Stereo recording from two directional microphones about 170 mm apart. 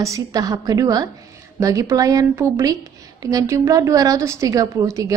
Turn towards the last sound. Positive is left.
turn(degrees=-20)  # may be behind; listen again after turning